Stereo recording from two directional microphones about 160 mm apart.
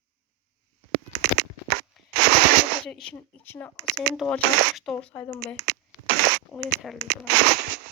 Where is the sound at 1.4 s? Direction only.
90° right.